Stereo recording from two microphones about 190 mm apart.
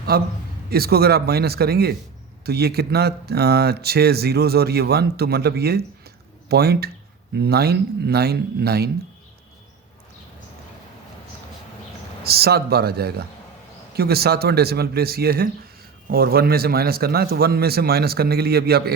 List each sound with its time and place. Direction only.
0.1 s a man's voice: 55° right (ahead or behind)
12.2 s speech: 55° right (ahead or behind)